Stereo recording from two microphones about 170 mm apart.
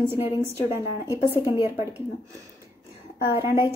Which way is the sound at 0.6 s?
15° right (ahead or behind).